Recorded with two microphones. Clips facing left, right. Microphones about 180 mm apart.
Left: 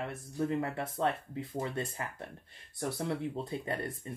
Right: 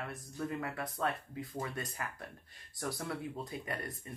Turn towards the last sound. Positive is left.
turn(degrees=25)  # may be behind; listen again after turning